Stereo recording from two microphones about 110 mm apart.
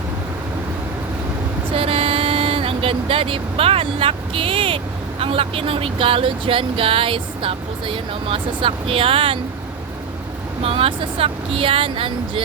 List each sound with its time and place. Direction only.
1.7 s vehicle: 60° right (ahead or behind)
5.2 s speech: 60° right (ahead or behind)
10.6 s speech: 60° right (ahead or behind)